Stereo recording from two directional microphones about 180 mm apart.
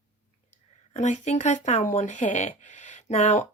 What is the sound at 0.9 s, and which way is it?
Speech, 40° left (ahead or behind).